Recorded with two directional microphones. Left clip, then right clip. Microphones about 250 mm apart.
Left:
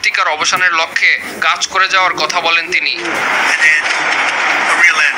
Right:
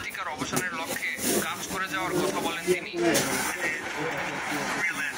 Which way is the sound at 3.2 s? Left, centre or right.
Left.